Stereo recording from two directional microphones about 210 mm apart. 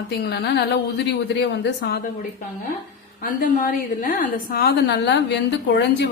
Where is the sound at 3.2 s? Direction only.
40° left (ahead or behind).